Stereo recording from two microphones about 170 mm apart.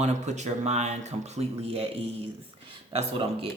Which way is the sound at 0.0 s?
40° right (ahead or behind).